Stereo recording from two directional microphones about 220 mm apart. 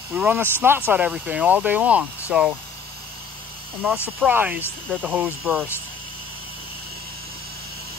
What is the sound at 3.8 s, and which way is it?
Speech, 5° right (ahead or behind).